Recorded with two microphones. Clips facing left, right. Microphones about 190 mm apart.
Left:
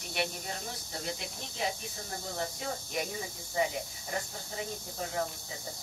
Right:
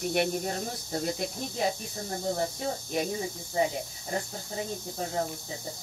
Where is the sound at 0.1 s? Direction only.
50° right (ahead or behind); by 3.1 s 35° right (ahead or behind).